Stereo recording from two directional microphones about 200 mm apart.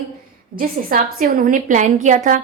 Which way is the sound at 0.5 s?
45° right (ahead or behind).